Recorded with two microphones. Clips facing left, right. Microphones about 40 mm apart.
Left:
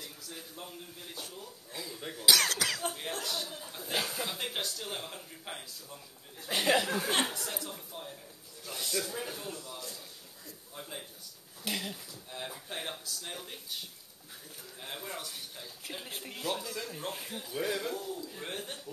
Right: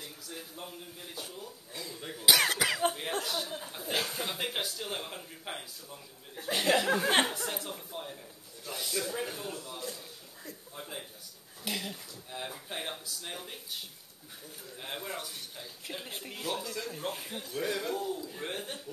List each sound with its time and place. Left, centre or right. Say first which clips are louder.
0.3 s speech: right 3 dB; centre
2.2 s speech: right 1 dB; centre
3.9 s speech: right 1 dB; centre
4.2 s speech: right 1 dB; centre
6.5 s speech: even; centre
7.3 s speech: right 3 dB; centre
8.6 s speech: right 1 dB; centre
15.0 s speech: right 1 dB; centre
17.9 s speech: right 3 dB; centre